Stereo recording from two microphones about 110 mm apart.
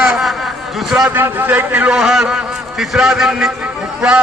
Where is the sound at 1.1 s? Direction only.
15° right (ahead or behind).